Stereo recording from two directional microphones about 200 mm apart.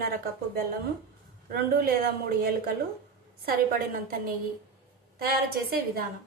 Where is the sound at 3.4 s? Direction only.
45° right (ahead or behind).